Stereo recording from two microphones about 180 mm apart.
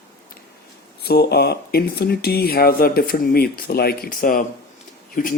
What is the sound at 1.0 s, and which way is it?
Speech, 60° left (ahead or behind).